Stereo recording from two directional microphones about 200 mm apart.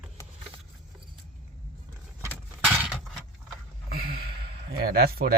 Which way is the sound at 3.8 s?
50° right (ahead or behind).